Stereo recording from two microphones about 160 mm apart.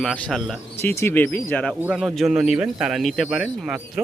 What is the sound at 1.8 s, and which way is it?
Speech, 5° right (ahead or behind).